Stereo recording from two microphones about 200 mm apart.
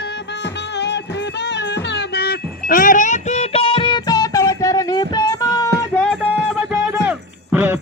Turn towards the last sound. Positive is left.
turn(degrees=-10)  # may be behind; listen again after turning